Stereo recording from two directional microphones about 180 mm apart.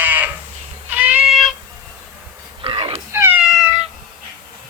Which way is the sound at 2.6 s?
30° right (ahead or behind).